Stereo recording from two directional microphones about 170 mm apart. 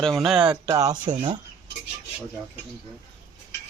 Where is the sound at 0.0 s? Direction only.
Centre (ahead or behind).